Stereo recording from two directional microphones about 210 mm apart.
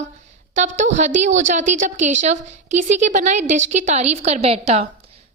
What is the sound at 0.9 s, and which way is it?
A woman's voice, 35° right (ahead or behind).